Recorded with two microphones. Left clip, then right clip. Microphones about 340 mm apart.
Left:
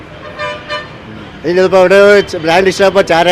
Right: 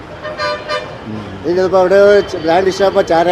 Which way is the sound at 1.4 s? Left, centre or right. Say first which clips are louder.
Left 4 dB; left.